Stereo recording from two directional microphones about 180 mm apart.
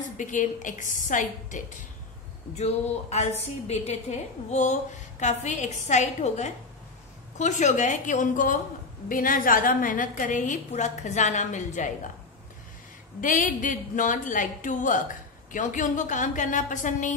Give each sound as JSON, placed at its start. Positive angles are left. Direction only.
{"t": 0.2, "sound": "a woman's voice", "side_deg": 45}
{"t": 13.2, "sound": "a woman's voice", "side_deg": 45}